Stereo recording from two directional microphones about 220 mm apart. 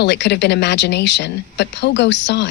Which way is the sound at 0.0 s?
50° left (ahead or behind).